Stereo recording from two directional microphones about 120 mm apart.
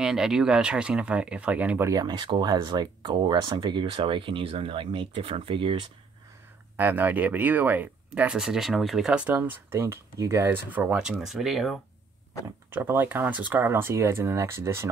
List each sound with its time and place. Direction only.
0.0 s speech: 5° right (ahead or behind)
1.9 s speech: 35° right (ahead or behind)
6.8 s speech: 15° right (ahead or behind)
11.0 s speech: 5° right (ahead or behind)
12.6 s speech: 20° right (ahead or behind)